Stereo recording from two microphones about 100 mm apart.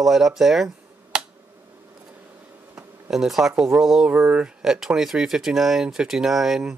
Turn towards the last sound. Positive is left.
turn(degrees=-5)  # may be behind; listen again after turning